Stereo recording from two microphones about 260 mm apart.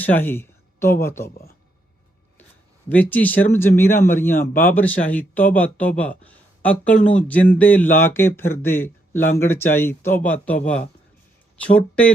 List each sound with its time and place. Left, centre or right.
0.0 s speech: centre
1.3 s speech: left
2.9 s speech: centre